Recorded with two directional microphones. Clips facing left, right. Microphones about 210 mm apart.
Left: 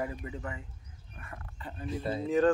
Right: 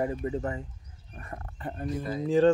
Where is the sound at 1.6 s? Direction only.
50° right (ahead or behind).